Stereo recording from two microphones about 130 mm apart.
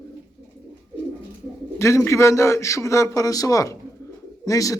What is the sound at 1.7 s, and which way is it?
Speech, 20° left (ahead or behind).